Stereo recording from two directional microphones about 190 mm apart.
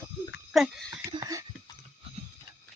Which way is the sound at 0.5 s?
Centre (ahead or behind).